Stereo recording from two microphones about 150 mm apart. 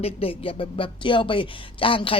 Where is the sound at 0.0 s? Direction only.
40° left (ahead or behind).